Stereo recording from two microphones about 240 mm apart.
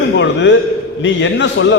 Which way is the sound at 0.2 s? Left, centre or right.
Left.